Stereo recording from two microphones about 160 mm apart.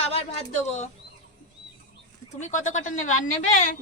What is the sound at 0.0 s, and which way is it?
Speech, 40° left (ahead or behind).